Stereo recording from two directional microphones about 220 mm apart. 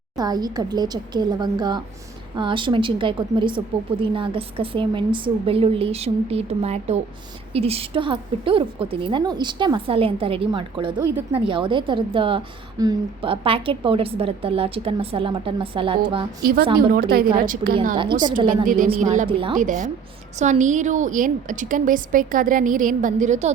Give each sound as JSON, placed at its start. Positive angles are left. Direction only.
{"t": 0.2, "sound": "a woman's voice", "side_deg": -20}
{"t": 16.4, "sound": "a woman's voice", "side_deg": -45}
{"t": 17.9, "sound": "a woman's voice", "side_deg": -20}
{"t": 18.4, "sound": "a woman's voice", "side_deg": -40}
{"t": 19.3, "sound": "a woman's voice", "side_deg": -25}
{"t": 19.5, "sound": "a woman's voice", "side_deg": -35}